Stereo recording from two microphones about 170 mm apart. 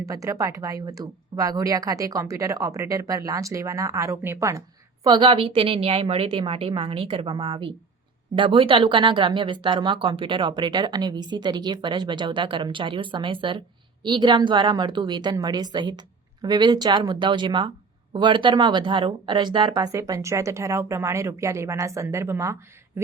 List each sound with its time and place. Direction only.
0.0 s a woman's voice: 20° right (ahead or behind)